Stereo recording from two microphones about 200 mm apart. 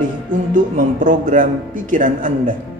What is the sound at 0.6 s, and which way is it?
Speech, 40° right (ahead or behind).